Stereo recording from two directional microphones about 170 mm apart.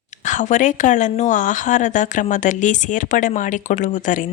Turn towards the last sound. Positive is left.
turn(degrees=50)  # may be behind; listen again after turning